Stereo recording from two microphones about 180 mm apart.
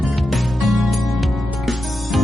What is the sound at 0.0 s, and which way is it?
Music, centre (ahead or behind).